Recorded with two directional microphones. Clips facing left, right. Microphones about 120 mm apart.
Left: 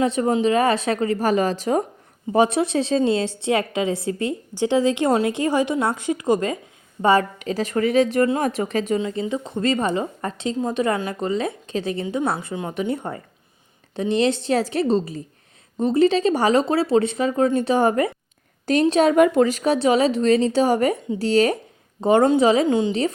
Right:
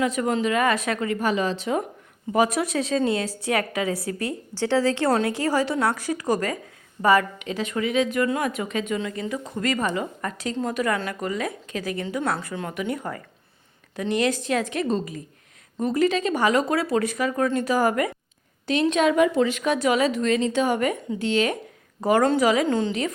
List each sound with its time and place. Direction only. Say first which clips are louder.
0.0 s a woman's voice: left 4 dB; 30° left (ahead or behind)
2.3 s a woman's voice: left 4 dB; 25° left (ahead or behind)
18.6 s speech: left 4 dB; 40° left (ahead or behind)
19.1 s speech: left 4 dB; 50° left (ahead or behind)
22.0 s a woman's voice: left 4 dB; 25° left (ahead or behind)
22.6 s speech: left 3 dB; 15° left (ahead or behind)
22.9 s speech: left 4 dB; 30° left (ahead or behind)